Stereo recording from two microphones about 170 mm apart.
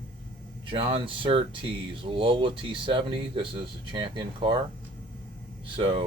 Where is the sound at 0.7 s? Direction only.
30° right (ahead or behind).